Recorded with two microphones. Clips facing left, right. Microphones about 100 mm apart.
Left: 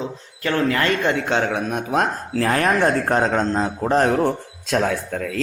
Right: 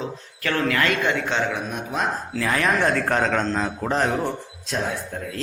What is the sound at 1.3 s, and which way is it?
Speech, 60° left (ahead or behind).